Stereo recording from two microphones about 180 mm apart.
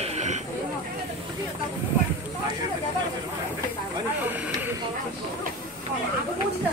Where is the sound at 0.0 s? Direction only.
40° right (ahead or behind).